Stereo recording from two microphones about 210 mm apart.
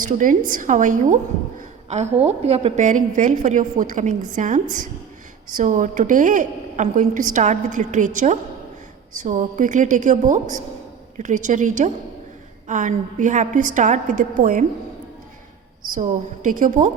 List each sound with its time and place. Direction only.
0.0 s a woman's voice: 40° right (ahead or behind)
15.9 s a woman's voice: 40° right (ahead or behind)